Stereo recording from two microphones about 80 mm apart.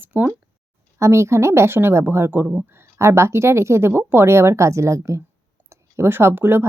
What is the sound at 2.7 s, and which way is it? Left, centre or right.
Speech, right.